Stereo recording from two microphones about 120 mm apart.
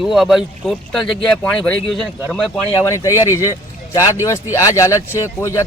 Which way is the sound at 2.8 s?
25° left (ahead or behind).